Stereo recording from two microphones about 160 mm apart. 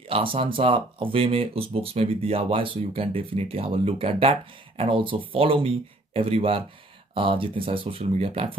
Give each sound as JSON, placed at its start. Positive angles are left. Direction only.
{"t": 0.1, "sound": "speech", "side_deg": -35}